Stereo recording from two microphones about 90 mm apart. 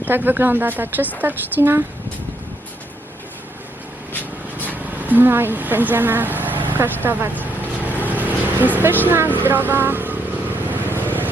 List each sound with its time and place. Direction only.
0.0 s speech: 20° right (ahead or behind)
4.7 s speech: 20° right (ahead or behind)
10.8 s vehicle: 20° right (ahead or behind)